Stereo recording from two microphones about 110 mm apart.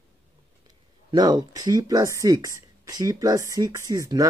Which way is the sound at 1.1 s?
40° right (ahead or behind).